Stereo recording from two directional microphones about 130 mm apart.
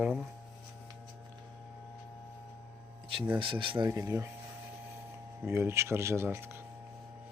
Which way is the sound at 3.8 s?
25° right (ahead or behind).